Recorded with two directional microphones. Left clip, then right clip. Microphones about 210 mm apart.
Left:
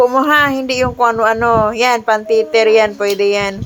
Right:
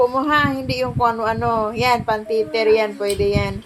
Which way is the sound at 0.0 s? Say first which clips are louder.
Left 6 dB; 30° left (ahead or behind).